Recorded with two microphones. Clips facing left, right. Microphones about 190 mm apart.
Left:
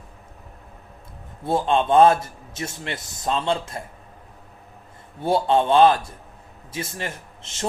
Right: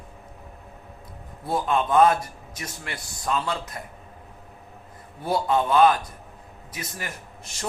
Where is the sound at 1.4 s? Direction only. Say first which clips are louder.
Left 4 dB; 25° left (ahead or behind).